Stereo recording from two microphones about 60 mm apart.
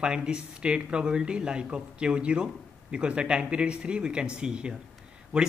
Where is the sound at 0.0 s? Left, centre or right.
Centre.